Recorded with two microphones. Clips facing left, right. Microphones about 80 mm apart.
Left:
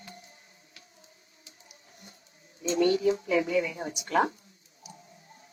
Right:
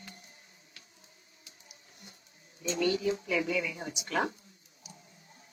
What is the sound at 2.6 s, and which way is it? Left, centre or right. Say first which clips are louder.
A woman's voice: left 5 dB; left.